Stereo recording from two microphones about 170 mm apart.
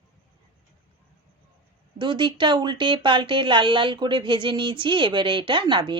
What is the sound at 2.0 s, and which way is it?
Speech, 25° right (ahead or behind).